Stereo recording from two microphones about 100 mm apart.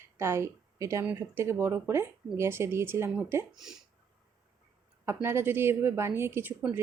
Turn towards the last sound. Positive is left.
turn(degrees=-20)  # may be behind; listen again after turning